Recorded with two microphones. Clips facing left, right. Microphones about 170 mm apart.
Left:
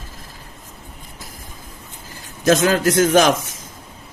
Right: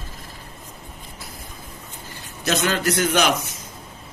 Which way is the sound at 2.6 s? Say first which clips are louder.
Left 6 dB; 45° left (ahead or behind).